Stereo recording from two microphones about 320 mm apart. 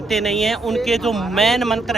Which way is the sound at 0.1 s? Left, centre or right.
Centre.